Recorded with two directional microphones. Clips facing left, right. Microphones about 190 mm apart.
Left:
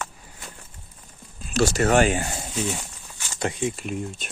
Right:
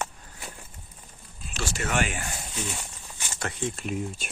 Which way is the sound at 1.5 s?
40° left (ahead or behind).